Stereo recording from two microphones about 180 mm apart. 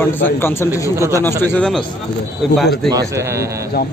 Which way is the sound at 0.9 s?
15° right (ahead or behind).